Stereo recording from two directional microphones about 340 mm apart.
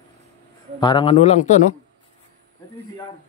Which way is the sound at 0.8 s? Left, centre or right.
Centre.